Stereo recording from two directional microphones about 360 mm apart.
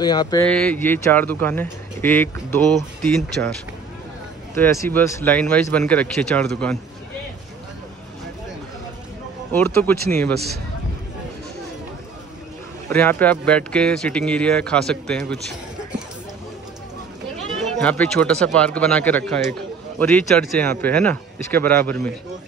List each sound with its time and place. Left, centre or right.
0.0 s speech: centre
4.6 s speech: centre
9.5 s speech: centre
10.3 s speech: right
12.9 s speech: centre
17.7 s speech: centre